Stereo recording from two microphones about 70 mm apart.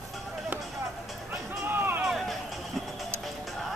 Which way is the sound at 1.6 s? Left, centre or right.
Right.